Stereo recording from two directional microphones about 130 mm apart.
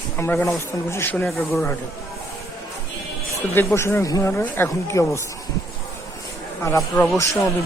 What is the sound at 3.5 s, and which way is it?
Speech, 15° left (ahead or behind).